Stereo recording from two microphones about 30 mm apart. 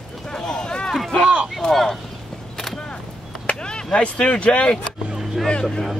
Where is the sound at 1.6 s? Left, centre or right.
Centre.